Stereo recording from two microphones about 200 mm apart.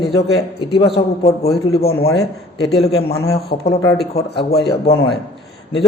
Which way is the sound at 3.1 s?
15° left (ahead or behind).